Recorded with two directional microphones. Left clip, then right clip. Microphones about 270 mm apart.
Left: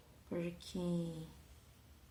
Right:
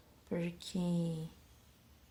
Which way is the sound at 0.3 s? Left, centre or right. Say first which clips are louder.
Right 3 dB; right.